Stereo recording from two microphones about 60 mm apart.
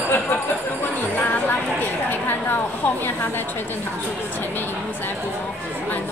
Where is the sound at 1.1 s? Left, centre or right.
Left.